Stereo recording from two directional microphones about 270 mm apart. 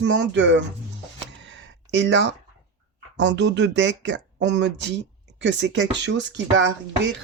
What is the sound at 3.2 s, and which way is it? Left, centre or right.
Speech, right.